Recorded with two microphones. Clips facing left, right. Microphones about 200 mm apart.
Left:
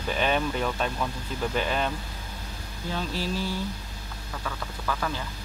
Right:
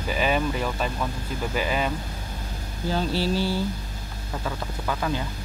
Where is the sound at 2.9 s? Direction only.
30° right (ahead or behind).